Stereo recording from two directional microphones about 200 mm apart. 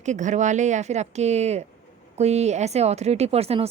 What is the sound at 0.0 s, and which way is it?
A woman's voice, 35° right (ahead or behind).